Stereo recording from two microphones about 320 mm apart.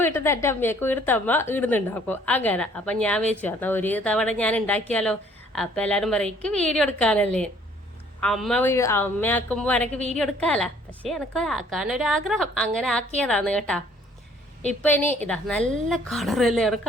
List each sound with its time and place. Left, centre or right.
0.0 s a woman's voice: centre